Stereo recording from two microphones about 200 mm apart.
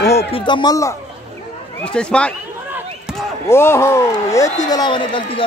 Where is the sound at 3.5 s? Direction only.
15° left (ahead or behind).